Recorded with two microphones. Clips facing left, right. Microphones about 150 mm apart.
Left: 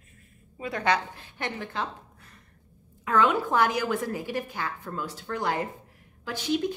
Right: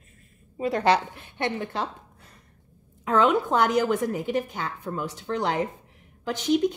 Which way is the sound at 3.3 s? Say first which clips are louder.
Right 2 dB; 15° right (ahead or behind).